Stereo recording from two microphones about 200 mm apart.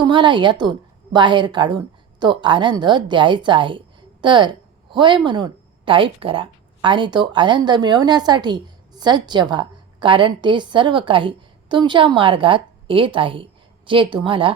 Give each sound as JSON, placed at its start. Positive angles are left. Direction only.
{"t": 0.0, "sound": "a woman's voice", "side_deg": -25}